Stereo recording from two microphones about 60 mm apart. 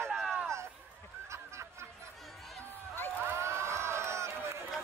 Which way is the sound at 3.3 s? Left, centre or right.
Right.